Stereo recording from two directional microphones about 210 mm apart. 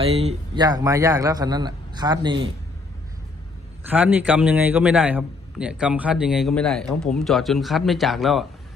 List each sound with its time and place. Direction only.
0.0 s speech: 30° right (ahead or behind)
0.6 s a man's voice: 15° right (ahead or behind)
3.8 s a man's voice: 10° right (ahead or behind)